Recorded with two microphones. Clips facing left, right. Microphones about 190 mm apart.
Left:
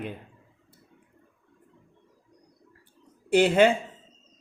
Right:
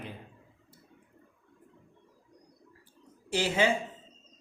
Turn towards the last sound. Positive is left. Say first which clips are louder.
# left 8 dB
turn(degrees=60)  # may be behind; listen again after turning